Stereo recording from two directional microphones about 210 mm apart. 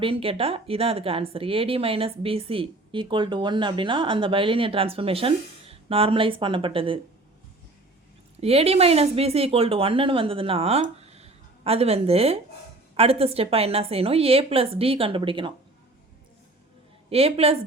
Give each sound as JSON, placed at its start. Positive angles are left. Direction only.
{"t": 0.0, "sound": "speech", "side_deg": -25}
{"t": 8.4, "sound": "speech", "side_deg": -30}
{"t": 17.1, "sound": "speech", "side_deg": -30}